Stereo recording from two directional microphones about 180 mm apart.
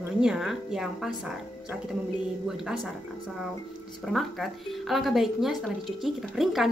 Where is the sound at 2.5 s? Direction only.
5° right (ahead or behind).